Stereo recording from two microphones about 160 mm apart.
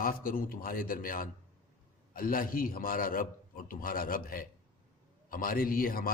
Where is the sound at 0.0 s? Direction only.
65° left (ahead or behind).